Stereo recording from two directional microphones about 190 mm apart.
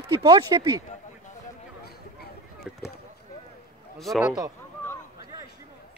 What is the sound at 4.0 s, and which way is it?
Speech, centre (ahead or behind).